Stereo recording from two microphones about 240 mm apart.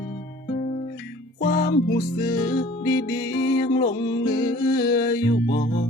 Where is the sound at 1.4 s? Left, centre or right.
Left.